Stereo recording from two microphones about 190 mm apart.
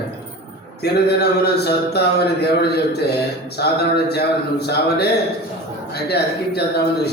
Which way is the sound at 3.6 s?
60° left (ahead or behind).